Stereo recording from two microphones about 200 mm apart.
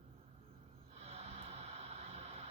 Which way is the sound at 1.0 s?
30° right (ahead or behind).